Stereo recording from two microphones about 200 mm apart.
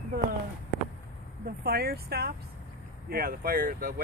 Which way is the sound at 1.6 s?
50° right (ahead or behind).